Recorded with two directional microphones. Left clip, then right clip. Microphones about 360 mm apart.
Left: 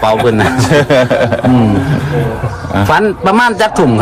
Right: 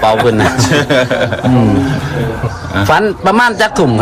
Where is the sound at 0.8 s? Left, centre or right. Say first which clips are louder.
Left 5 dB; left.